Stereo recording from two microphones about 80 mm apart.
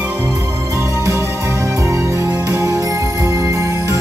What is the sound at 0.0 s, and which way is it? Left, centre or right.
Music, right.